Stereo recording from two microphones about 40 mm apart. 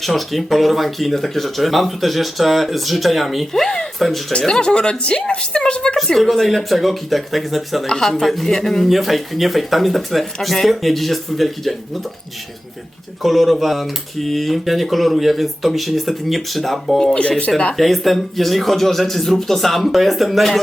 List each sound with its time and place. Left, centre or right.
0.0 s speech: centre; by 6.0 s left
6.1 s speech: centre
13.2 s speech: centre